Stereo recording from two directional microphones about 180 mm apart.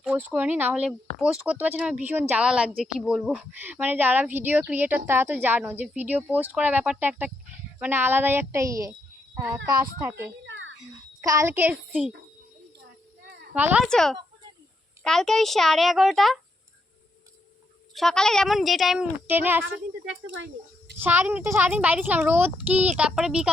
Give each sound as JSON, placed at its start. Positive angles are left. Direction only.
{"t": 0.0, "sound": "a woman's voice", "side_deg": -5}
{"t": 10.1, "sound": "speech", "side_deg": -10}
{"t": 10.4, "sound": "a sound", "side_deg": -90}
{"t": 11.2, "sound": "speech", "side_deg": -20}
{"t": 13.2, "sound": "a sound", "side_deg": -60}
{"t": 13.5, "sound": "speech", "side_deg": -10}
{"t": 13.8, "sound": "speech", "side_deg": 5}
{"t": 17.9, "sound": "speech", "side_deg": 5}
{"t": 21.0, "sound": "speech", "side_deg": -10}